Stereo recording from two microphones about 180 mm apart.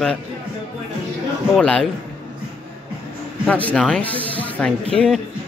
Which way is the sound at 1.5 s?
5° left (ahead or behind).